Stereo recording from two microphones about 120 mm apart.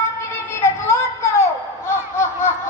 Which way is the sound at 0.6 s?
25° left (ahead or behind).